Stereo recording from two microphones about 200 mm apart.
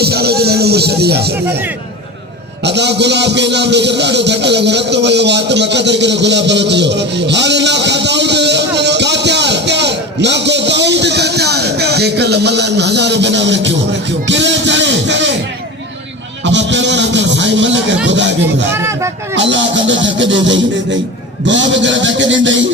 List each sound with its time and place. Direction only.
0.0 s music: 55° right (ahead or behind)
2.6 s a sound: 60° right (ahead or behind)
14.3 s music: 65° right (ahead or behind)
16.4 s speech: 65° right (ahead or behind)
18.7 s speech: 15° right (ahead or behind)
19.3 s speech: 65° right (ahead or behind)